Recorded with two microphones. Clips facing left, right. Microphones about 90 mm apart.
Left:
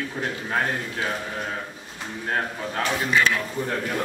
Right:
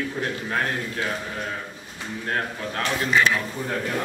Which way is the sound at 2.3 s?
5° left (ahead or behind).